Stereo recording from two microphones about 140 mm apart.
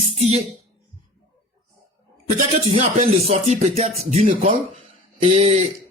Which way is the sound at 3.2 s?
45° right (ahead or behind).